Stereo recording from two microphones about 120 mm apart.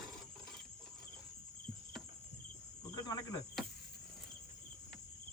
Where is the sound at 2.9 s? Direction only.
30° left (ahead or behind).